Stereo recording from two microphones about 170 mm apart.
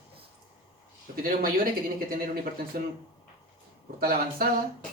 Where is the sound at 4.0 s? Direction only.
60° right (ahead or behind).